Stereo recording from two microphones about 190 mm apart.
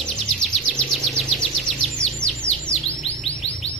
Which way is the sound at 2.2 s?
15° right (ahead or behind).